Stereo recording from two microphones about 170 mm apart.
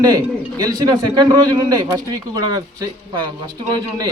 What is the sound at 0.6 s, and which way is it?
A man's voice, 25° right (ahead or behind).